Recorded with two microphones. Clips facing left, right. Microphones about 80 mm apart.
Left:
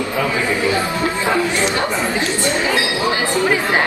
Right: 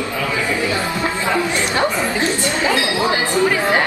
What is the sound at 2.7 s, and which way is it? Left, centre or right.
Chatter, left.